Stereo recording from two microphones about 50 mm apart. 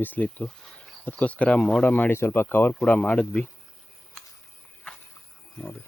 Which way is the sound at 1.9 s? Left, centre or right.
Left.